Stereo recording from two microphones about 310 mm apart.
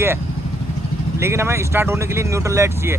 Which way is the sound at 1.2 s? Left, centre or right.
Centre.